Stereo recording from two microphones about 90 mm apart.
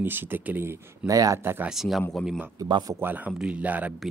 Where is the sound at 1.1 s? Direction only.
40° right (ahead or behind).